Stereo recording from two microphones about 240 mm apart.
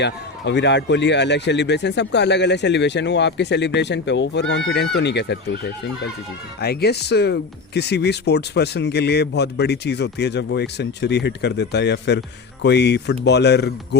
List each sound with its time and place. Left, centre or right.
0.0 s speech: left